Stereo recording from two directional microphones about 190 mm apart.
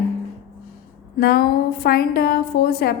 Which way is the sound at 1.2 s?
55° left (ahead or behind).